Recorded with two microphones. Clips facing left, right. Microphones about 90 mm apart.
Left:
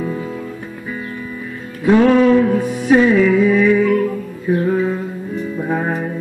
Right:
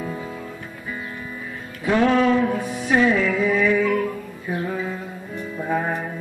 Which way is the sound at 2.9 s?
10° left (ahead or behind).